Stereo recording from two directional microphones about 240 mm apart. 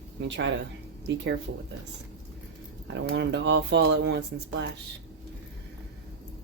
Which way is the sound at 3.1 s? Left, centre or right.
Right.